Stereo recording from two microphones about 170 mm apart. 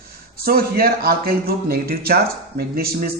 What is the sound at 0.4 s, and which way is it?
Speech, 60° right (ahead or behind).